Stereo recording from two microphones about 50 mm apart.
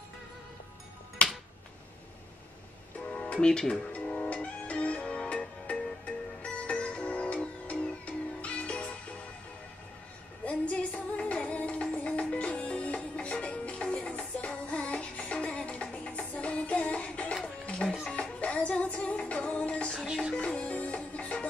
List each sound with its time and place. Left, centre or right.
1.2 s music: left
3.1 s music: left
3.3 s speech: centre
3.9 s music: left
10.4 s music: left
17.8 s music: centre
18.1 s music: left
20.1 s music: centre
20.3 s music: left